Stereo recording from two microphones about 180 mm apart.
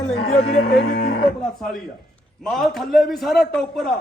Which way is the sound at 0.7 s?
65° left (ahead or behind).